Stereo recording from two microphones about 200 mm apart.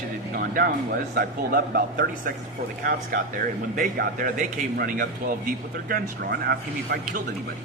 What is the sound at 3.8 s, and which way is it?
Speech, 45° right (ahead or behind).